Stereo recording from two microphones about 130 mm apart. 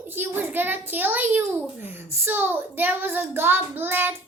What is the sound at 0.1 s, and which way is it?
A child's voice, 15° right (ahead or behind).